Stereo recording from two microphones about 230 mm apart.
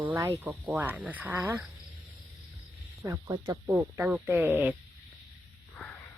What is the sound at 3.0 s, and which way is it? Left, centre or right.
Speech, centre.